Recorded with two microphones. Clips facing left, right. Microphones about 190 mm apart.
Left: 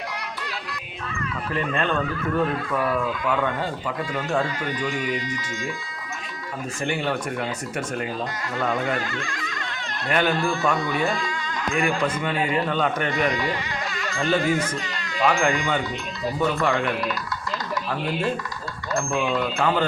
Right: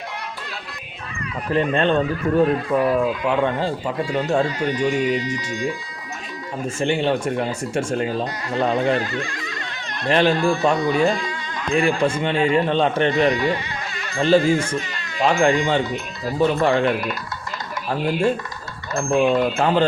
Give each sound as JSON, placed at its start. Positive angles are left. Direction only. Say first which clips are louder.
{"t": 1.5, "sound": "speech", "louder": "right 7 dB", "side_deg": -35}
{"t": 6.7, "sound": "speech", "louder": "right 6 dB", "side_deg": -25}
{"t": 19.3, "sound": "speech", "louder": "right 5 dB", "side_deg": -25}